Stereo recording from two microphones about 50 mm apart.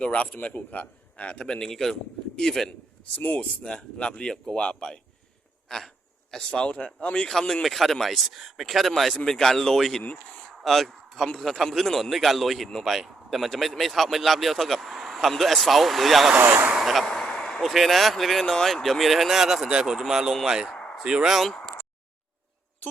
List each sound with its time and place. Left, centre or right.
0.0 s speech: left
1.5 s speech: centre
3.2 s speech: left
3.6 s speech: centre
5.6 s a sound: centre
6.3 s speech: centre
7.3 s speech: centre
10.0 s speech: left
10.5 s speech: centre
16.4 s speech: right
16.7 s speech: centre
17.1 s speech: centre
19.4 s speech: centre